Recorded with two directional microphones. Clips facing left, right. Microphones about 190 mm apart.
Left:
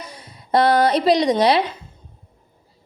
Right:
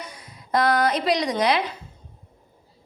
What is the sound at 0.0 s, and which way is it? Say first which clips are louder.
A woman's voice: left 2 dB; 30° left (ahead or behind).